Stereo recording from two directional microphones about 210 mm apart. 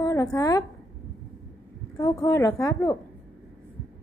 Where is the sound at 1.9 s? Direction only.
15° left (ahead or behind).